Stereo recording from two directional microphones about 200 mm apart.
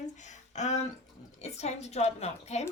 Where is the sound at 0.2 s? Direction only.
35° left (ahead or behind).